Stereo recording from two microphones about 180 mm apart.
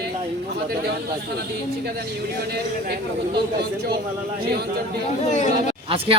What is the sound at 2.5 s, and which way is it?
Speech, 60° right (ahead or behind).